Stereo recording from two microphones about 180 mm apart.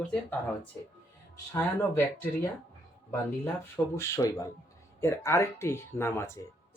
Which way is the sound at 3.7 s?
15° left (ahead or behind).